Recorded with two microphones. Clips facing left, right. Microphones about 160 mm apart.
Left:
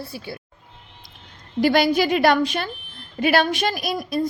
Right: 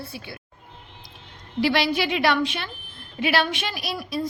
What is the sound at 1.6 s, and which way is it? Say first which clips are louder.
A woman's voice: left 5 dB; 45° left (ahead or behind).